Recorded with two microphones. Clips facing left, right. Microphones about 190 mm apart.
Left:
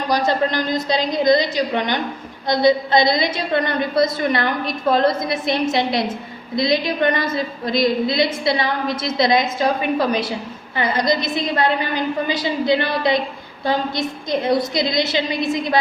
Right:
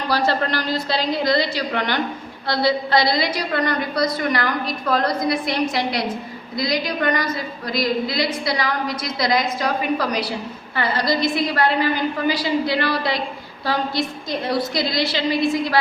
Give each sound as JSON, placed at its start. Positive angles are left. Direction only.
{"t": 0.1, "sound": "a woman's voice", "side_deg": 20}